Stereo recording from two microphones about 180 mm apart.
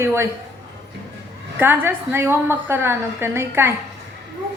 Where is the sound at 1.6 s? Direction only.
10° right (ahead or behind).